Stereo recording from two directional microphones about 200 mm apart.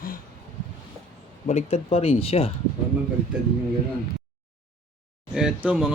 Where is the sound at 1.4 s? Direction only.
30° left (ahead or behind).